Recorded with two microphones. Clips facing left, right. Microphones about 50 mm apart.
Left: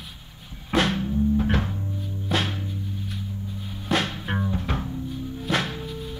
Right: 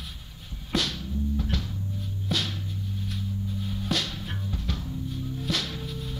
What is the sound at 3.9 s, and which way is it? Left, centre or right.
Music, left.